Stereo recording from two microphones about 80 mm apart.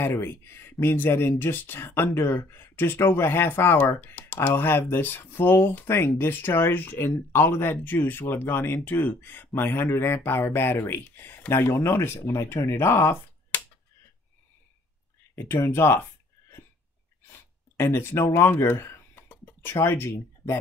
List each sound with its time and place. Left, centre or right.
0.0 s speech: left
15.3 s speech: left
17.7 s speech: left